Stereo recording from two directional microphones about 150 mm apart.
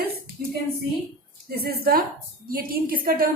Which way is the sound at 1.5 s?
90° right.